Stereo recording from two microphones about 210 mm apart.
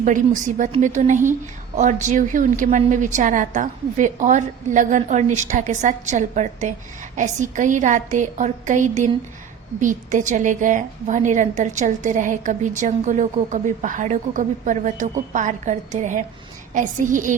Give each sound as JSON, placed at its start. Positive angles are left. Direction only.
{"t": 0.0, "sound": "a woman's voice", "side_deg": -40}